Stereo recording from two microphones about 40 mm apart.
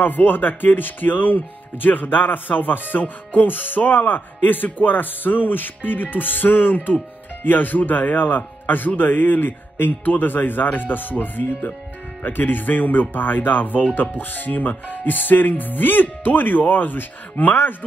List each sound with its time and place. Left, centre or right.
0.0 s speech: left